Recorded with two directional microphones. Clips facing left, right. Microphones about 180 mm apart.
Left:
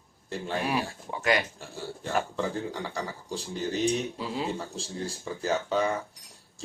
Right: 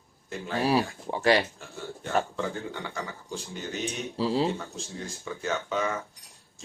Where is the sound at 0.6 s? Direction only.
35° right (ahead or behind).